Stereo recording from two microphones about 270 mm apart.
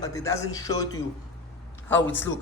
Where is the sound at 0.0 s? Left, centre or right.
Centre.